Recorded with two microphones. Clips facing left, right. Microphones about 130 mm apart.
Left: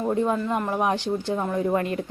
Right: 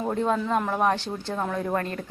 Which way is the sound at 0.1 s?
5° left (ahead or behind).